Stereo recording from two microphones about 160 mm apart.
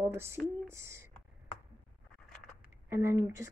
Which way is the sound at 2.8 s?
15° right (ahead or behind).